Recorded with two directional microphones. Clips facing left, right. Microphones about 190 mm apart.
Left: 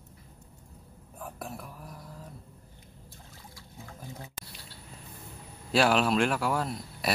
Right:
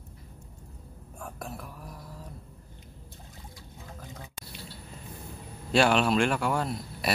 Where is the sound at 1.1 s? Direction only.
5° left (ahead or behind).